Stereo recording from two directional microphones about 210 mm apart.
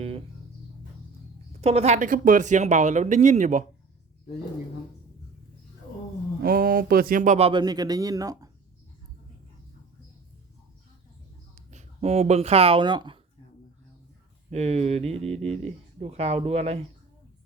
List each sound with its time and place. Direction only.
1.6 s speech: 30° right (ahead or behind)
6.4 s speech: 45° right (ahead or behind); by 8.4 s 15° right (ahead or behind)
11.5 s speech: 35° right (ahead or behind)
14.5 s speech: 30° right (ahead or behind)